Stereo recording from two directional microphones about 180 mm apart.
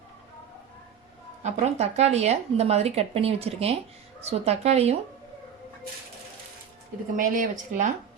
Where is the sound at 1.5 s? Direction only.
40° right (ahead or behind).